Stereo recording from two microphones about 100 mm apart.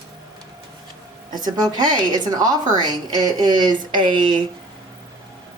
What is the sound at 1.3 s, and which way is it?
A woman's voice, 45° right (ahead or behind).